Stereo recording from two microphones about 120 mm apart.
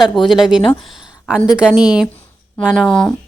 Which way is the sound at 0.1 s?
Centre (ahead or behind).